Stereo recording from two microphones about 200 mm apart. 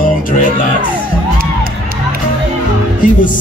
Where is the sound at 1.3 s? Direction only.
45° right (ahead or behind).